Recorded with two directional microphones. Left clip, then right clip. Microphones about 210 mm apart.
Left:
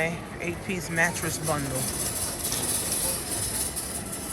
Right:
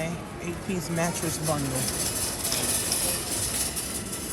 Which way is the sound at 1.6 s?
Centre (ahead or behind).